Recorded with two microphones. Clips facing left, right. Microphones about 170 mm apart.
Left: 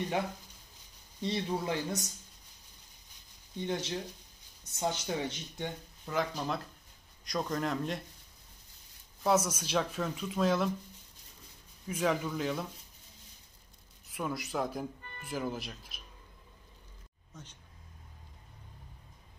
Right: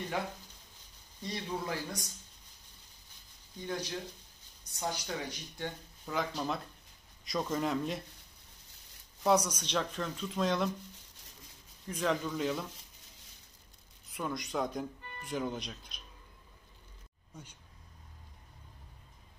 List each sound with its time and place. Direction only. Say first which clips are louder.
1.2 s speech: left 4 dB; 25° left (ahead or behind)
3.5 s speech: left 3 dB; 25° left (ahead or behind)
6.0 s speech: left 1 dB; centre (ahead or behind)
9.2 s speech: even; 5° left (ahead or behind)
11.9 s speech: left 1 dB; 5° left (ahead or behind)
14.1 s speech: left 1 dB; 5° left (ahead or behind)
17.3 s speech: right 1 dB; 10° right (ahead or behind)